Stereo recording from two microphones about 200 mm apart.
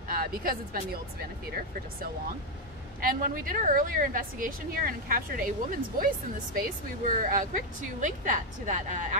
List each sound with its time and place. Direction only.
0.1 s a woman's voice: 45° right (ahead or behind)
3.0 s a woman's voice: 45° right (ahead or behind)
7.1 s a woman's voice: 45° right (ahead or behind)